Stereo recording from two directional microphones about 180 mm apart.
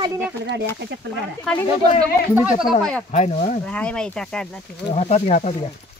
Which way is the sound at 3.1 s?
40° left (ahead or behind).